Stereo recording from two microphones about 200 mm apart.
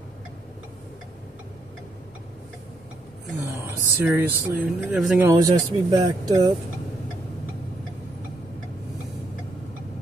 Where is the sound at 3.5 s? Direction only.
10° right (ahead or behind).